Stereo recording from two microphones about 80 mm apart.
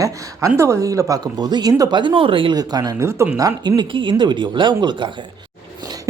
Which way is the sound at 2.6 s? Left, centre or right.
Right.